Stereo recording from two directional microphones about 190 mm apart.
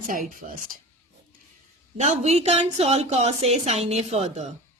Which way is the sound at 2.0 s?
35° right (ahead or behind).